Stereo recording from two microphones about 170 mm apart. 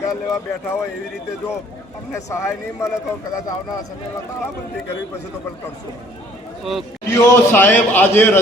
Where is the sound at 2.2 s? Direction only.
15° left (ahead or behind).